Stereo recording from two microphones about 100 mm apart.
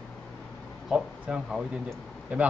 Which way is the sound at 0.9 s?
10° right (ahead or behind).